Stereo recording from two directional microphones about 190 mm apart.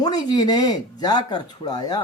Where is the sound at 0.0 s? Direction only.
20° left (ahead or behind).